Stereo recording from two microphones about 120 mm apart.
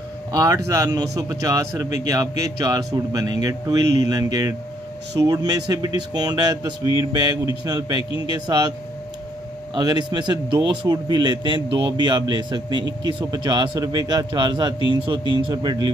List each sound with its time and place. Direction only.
0.3 s a man's voice: 30° right (ahead or behind)
9.8 s a man's voice: 35° right (ahead or behind)